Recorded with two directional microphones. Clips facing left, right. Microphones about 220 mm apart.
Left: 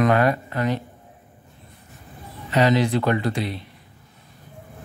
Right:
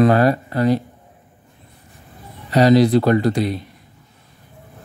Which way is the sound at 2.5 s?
35° right (ahead or behind).